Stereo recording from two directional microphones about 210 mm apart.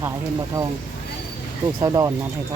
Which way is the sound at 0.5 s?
15° right (ahead or behind).